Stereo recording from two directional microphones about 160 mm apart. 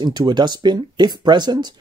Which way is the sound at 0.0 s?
25° right (ahead or behind).